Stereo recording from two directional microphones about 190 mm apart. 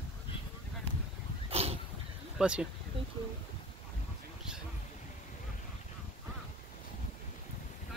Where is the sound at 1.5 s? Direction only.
30° right (ahead or behind).